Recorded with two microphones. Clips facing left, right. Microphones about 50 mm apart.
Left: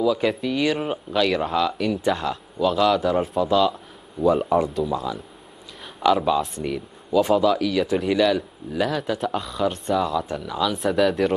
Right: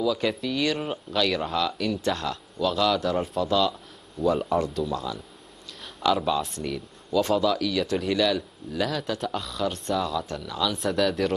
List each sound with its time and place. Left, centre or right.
0.0 s speech: centre